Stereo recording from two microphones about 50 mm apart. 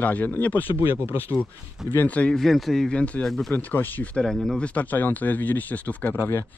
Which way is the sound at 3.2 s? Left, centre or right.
Centre.